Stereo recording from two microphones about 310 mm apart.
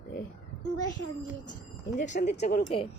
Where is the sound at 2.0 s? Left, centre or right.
Left.